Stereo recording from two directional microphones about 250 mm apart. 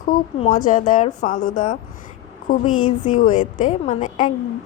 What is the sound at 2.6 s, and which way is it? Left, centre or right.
Speech, left.